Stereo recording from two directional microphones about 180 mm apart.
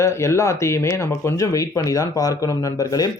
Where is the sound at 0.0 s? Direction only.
15° left (ahead or behind).